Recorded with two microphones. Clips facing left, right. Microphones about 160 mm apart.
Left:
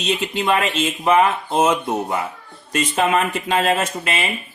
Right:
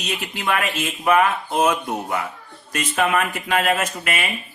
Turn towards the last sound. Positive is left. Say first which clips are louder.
# left 2 dB
turn(degrees=30)  # may be behind; listen again after turning